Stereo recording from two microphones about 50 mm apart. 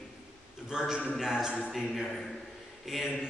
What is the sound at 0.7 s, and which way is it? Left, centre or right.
Speech, centre.